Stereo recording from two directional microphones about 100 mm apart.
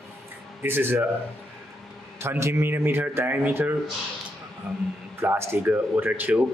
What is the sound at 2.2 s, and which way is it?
Speech, 25° right (ahead or behind).